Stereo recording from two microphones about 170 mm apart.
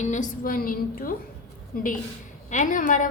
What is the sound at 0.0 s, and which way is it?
A woman's voice, 45° left (ahead or behind).